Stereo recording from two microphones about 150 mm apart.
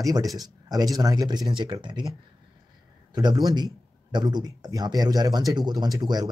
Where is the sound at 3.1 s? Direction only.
30° right (ahead or behind).